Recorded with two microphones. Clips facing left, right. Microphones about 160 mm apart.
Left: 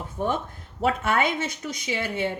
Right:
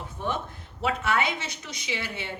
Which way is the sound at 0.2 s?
45° left (ahead or behind).